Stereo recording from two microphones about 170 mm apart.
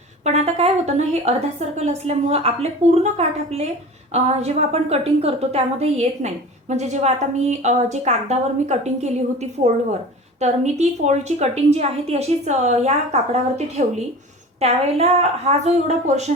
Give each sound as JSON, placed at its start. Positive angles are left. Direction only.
{"t": 0.3, "sound": "a woman's voice", "side_deg": -40}